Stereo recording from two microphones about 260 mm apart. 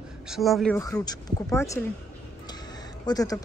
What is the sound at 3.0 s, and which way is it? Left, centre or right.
Speech, centre.